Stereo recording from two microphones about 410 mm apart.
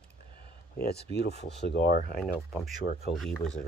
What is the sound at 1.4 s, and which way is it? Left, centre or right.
Speech, left.